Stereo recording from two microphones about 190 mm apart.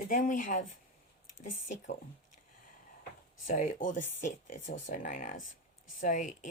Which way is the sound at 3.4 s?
45° left (ahead or behind).